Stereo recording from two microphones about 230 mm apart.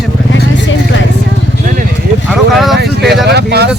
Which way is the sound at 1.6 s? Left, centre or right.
Right.